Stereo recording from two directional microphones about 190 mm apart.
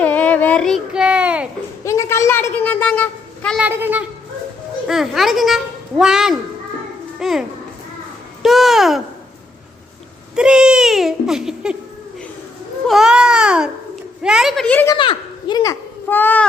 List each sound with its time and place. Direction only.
0.0 s child singing: 10° left (ahead or behind)
1.8 s a sound: 15° left (ahead or behind)
3.6 s speech: 10° right (ahead or behind)
7.2 s a sound: centre (ahead or behind)
10.3 s speech: 5° right (ahead or behind)
12.9 s speech: 5° right (ahead or behind)
14.9 s a child's voice: 25° left (ahead or behind)